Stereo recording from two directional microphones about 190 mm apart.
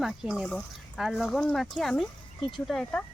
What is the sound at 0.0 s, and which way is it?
Speech, centre (ahead or behind).